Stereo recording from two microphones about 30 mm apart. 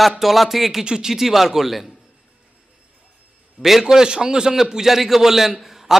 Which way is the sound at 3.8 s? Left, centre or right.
Right.